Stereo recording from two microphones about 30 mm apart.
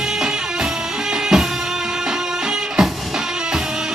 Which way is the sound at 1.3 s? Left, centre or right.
Centre.